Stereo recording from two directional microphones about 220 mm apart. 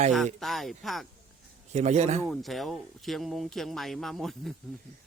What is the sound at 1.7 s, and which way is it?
Speech, 30° right (ahead or behind).